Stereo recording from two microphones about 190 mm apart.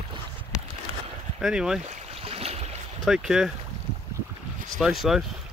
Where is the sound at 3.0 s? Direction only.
5° right (ahead or behind).